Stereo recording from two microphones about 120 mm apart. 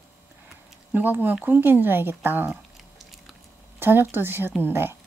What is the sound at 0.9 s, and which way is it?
Speech, 15° right (ahead or behind).